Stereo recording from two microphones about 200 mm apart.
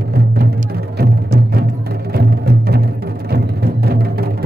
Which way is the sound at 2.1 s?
50° right (ahead or behind).